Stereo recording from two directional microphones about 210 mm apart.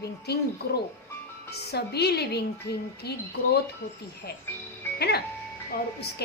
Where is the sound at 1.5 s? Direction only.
50° left (ahead or behind).